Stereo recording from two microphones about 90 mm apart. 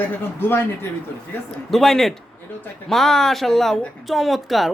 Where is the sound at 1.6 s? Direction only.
Centre (ahead or behind).